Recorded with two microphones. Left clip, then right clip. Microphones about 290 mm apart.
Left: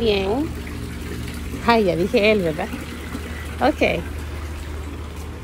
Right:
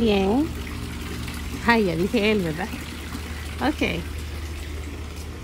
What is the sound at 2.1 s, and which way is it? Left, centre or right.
Speech, right.